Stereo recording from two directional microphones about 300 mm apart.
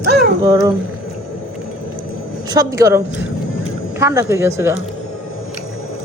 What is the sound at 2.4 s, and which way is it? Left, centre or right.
A woman's voice, centre.